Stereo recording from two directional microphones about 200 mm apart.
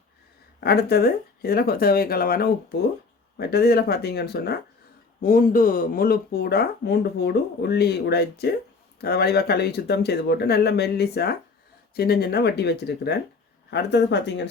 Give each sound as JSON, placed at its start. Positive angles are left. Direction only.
{"t": 0.6, "sound": "speech", "side_deg": 50}